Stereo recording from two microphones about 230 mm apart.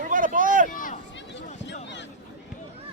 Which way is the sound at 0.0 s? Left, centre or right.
Right.